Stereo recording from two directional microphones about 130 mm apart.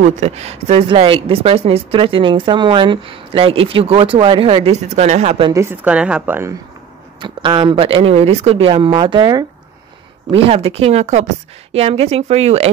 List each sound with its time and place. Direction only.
0.0 s speech: 60° right (ahead or behind)
5.5 s a woman's voice: 20° right (ahead or behind)
5.9 s speech: 10° right (ahead or behind)
7.2 s speech: 40° right (ahead or behind)
10.3 s speech: 50° right (ahead or behind)